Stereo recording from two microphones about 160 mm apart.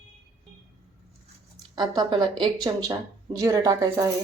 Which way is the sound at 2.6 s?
20° right (ahead or behind).